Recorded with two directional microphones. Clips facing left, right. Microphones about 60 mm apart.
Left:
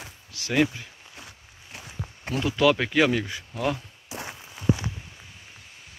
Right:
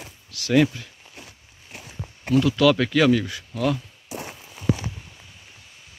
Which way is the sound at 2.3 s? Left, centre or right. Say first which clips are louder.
Right 4 dB; left.